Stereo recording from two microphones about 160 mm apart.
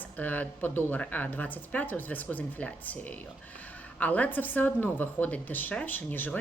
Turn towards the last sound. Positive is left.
turn(degrees=10)  # may be behind; listen again after turning